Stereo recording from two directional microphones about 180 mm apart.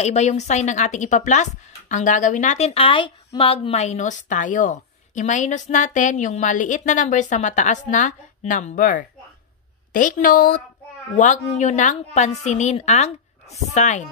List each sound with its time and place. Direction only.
0.0 s a woman's voice: 40° left (ahead or behind)